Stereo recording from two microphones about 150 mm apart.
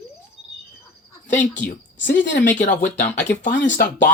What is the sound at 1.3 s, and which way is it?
Speech, 55° left (ahead or behind).